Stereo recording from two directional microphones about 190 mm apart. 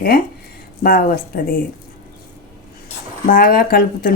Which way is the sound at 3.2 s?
45° left (ahead or behind).